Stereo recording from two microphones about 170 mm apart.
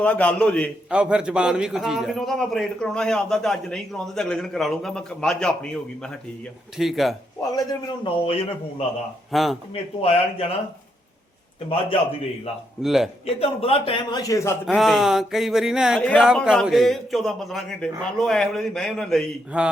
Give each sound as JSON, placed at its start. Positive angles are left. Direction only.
{"t": 0.0, "sound": "a man's voice", "side_deg": 10}
{"t": 0.9, "sound": "a man's voice", "side_deg": -5}
{"t": 7.5, "sound": "a man's voice", "side_deg": 20}
{"t": 9.3, "sound": "a man's voice", "side_deg": 0}
{"t": 10.0, "sound": "a man's voice", "side_deg": 35}
{"t": 11.7, "sound": "a man's voice", "side_deg": 35}
{"t": 12.8, "sound": "a man's voice", "side_deg": 0}
{"t": 13.2, "sound": "a man's voice", "side_deg": 35}
{"t": 14.2, "sound": "a man's voice", "side_deg": 20}
{"t": 14.8, "sound": "a man's voice", "side_deg": 0}